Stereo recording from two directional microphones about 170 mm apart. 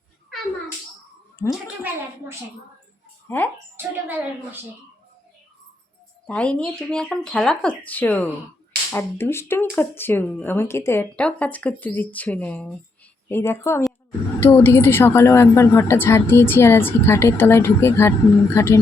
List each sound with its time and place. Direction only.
1.5 s speech: 5° right (ahead or behind)
3.2 s speech: 10° left (ahead or behind)
3.8 s a woman's voice: 10° right (ahead or behind)
6.2 s a woman's voice: 5° left (ahead or behind)